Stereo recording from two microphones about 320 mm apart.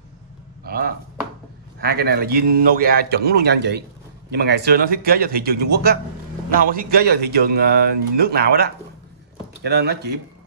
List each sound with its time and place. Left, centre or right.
0.7 s speech: right